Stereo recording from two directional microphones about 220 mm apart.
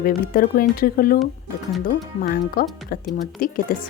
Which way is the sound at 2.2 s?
40° left (ahead or behind).